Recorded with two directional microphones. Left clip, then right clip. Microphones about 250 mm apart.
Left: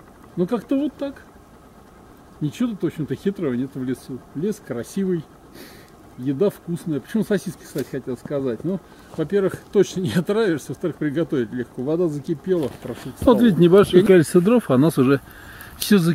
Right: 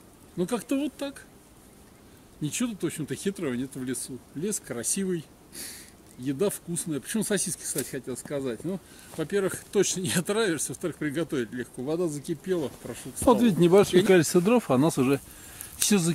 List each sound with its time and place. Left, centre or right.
0.4 s speech: centre
2.4 s speech: centre
13.3 s speech: centre